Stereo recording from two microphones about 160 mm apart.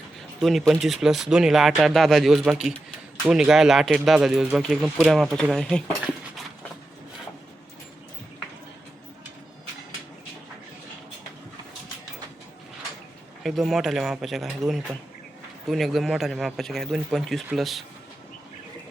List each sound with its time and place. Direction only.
0.3 s speech: centre (ahead or behind)
13.4 s speech: centre (ahead or behind)